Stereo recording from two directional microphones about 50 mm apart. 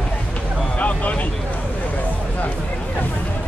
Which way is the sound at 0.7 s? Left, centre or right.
Left.